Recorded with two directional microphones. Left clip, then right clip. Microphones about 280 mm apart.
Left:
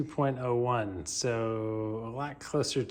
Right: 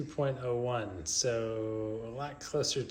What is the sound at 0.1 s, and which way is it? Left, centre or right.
Speech, left.